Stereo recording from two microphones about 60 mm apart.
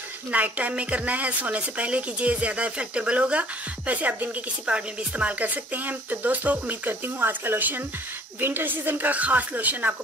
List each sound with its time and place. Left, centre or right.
0.3 s a woman's voice: right